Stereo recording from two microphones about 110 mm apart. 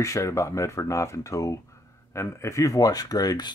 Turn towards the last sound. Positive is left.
turn(degrees=35)  # may be behind; listen again after turning